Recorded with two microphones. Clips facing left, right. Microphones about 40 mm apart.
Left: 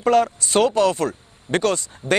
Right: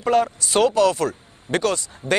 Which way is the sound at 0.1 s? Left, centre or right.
Left.